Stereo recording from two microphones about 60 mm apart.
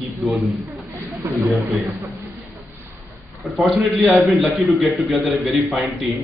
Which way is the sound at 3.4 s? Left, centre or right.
Centre.